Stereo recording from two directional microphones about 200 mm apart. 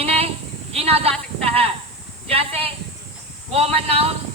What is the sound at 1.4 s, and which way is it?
Speech, 30° right (ahead or behind).